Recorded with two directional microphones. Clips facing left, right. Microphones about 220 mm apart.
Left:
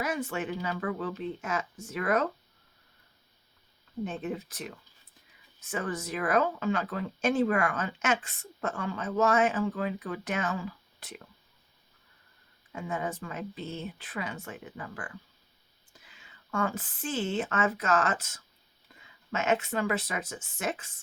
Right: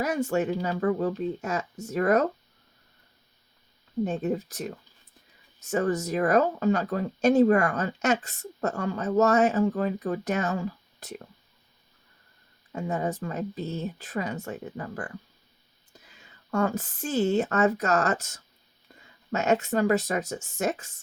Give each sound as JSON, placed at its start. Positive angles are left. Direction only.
{"t": 0.0, "sound": "a woman's voice", "side_deg": -45}
{"t": 4.0, "sound": "a woman's voice", "side_deg": -45}
{"t": 12.7, "sound": "speech", "side_deg": -40}
{"t": 16.5, "sound": "a woman's voice", "side_deg": -40}